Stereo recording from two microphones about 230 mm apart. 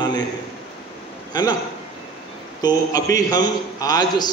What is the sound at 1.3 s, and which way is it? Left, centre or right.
Speech, centre.